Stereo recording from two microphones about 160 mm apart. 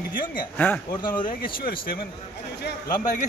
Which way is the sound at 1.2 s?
65° left (ahead or behind).